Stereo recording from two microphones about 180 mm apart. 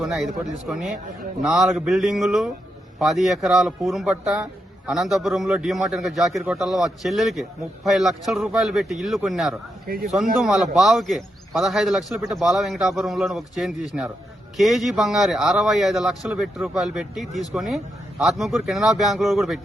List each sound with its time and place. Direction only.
0.0 s a man's voice: centre (ahead or behind)
9.8 s speech: 55° right (ahead or behind)
10.4 s a man's voice: centre (ahead or behind)